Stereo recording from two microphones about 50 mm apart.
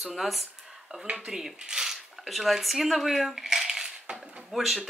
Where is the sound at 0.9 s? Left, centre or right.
Right.